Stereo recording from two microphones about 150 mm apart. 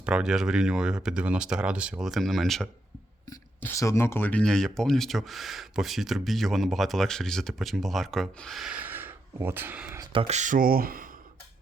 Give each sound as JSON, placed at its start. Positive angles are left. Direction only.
{"t": 0.0, "sound": "speech", "side_deg": -5}
{"t": 3.2, "sound": "speech", "side_deg": 20}
{"t": 10.0, "sound": "a sound", "side_deg": -35}
{"t": 10.3, "sound": "speech", "side_deg": -60}